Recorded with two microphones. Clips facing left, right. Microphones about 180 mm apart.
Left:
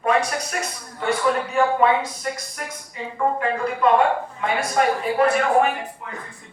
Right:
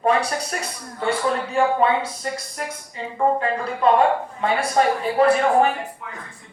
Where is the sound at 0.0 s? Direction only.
30° right (ahead or behind).